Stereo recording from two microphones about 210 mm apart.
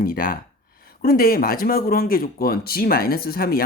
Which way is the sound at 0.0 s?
45° left (ahead or behind).